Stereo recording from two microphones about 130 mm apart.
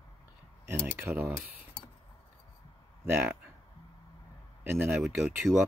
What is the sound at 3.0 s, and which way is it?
Speech, 15° right (ahead or behind).